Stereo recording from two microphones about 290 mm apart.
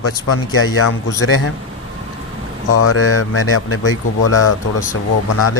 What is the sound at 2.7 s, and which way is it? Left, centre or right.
Speech, left.